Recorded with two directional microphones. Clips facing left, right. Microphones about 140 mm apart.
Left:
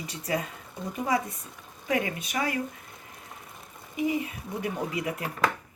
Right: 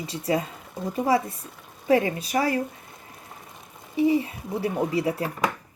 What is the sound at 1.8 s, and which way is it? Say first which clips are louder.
Speech: right 7 dB; 30° right (ahead or behind).